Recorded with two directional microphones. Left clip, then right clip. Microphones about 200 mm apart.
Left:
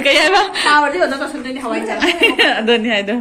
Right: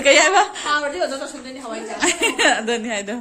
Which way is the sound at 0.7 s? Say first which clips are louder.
Left 8 dB; 20° right (ahead or behind).